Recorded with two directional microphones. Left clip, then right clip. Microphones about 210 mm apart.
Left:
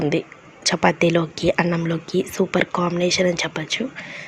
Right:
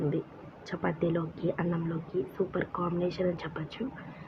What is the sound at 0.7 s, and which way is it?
Speech, 45° left (ahead or behind).